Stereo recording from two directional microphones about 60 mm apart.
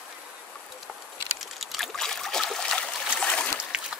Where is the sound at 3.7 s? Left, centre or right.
Centre.